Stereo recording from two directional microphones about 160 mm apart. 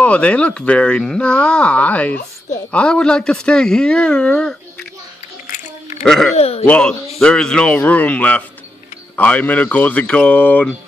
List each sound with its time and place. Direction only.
0.0 s speech: 10° left (ahead or behind)
5.5 s a sound: 45° left (ahead or behind)
6.0 s speech: centre (ahead or behind)
6.3 s speech: 40° left (ahead or behind)
6.6 s speech: 10° left (ahead or behind)